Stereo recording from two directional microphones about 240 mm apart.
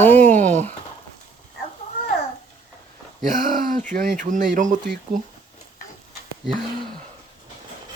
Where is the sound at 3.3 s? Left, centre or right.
Right.